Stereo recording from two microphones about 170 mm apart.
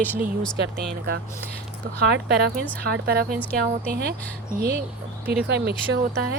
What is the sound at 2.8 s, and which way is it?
A woman's voice, 70° right (ahead or behind).